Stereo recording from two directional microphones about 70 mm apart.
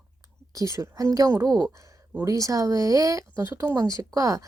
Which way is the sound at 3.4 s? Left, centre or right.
Right.